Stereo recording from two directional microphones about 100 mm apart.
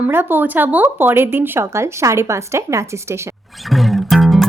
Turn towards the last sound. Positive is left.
turn(degrees=0)  # may be behind; listen again after turning